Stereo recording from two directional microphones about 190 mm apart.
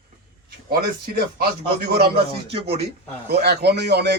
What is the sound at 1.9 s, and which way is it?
Speech, 55° right (ahead or behind).